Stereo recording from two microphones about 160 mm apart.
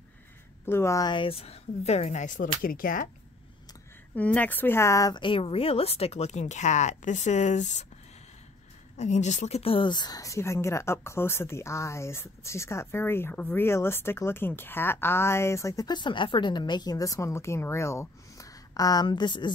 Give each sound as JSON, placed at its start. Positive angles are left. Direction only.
{"t": 0.7, "sound": "a woman's voice", "side_deg": 15}
{"t": 4.1, "sound": "speech", "side_deg": 10}
{"t": 8.9, "sound": "speech", "side_deg": 45}